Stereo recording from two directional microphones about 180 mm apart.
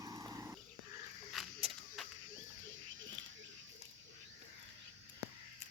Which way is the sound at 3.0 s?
90° right.